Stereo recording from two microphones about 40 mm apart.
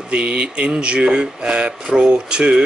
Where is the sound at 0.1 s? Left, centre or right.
Right.